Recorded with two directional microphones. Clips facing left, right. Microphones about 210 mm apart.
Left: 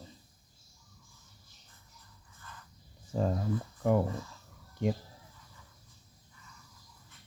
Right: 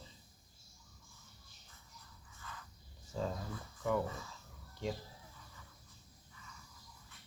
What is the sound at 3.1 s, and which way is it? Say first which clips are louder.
Speech: left 7 dB; 55° left (ahead or behind).